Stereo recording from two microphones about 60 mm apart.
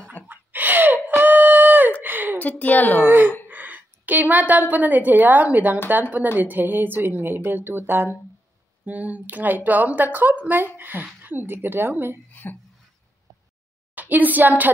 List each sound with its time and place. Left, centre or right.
0.1 s a sound: right
2.6 s speech: left
3.1 s a woman's voice: right
8.8 s a woman's voice: right
12.3 s speech: left
13.9 s a woman's voice: right